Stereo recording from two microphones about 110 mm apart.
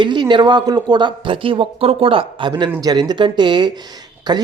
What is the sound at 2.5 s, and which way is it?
A man's voice, 40° right (ahead or behind).